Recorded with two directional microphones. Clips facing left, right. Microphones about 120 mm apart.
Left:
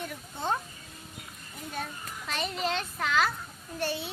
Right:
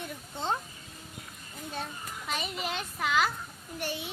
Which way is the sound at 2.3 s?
10° right (ahead or behind).